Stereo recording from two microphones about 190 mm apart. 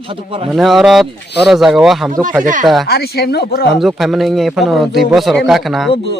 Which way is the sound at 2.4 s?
45° right (ahead or behind).